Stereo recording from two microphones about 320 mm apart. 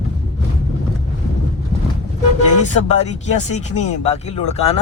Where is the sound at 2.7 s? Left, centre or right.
Left.